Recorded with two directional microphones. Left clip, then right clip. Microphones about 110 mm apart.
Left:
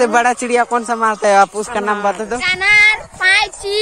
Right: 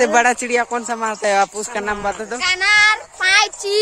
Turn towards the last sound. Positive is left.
turn(degrees=-45)  # may be behind; listen again after turning